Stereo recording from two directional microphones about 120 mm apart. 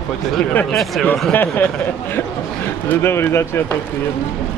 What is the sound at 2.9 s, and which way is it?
Speech, 20° left (ahead or behind).